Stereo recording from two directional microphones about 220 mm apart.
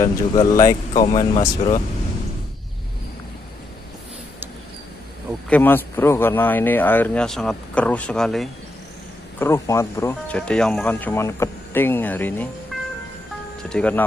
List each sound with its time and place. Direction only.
0.0 s speech: 15° left (ahead or behind)
5.5 s speech: 10° left (ahead or behind)
13.7 s speech: 5° left (ahead or behind)